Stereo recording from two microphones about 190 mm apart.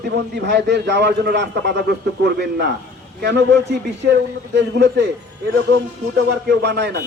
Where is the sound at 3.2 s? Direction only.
60° right (ahead or behind).